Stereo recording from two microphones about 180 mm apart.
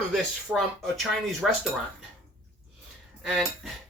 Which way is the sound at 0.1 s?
Centre (ahead or behind).